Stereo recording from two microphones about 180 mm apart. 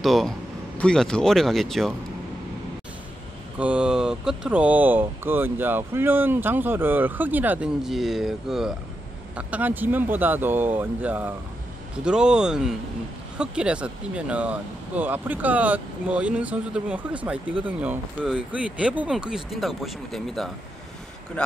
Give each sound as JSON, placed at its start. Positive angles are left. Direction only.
{"t": 0.0, "sound": "speech", "side_deg": 0}
{"t": 3.5, "sound": "speech", "side_deg": -5}